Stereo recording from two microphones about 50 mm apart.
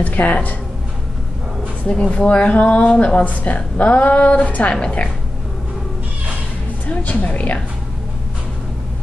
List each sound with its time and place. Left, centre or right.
0.0 s a woman's voice: left
2.0 s a woman's voice: left
6.9 s a woman's voice: left